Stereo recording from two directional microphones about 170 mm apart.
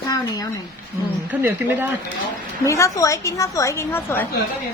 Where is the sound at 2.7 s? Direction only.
20° left (ahead or behind).